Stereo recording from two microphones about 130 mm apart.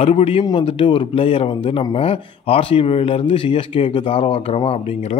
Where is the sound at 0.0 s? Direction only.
50° left (ahead or behind).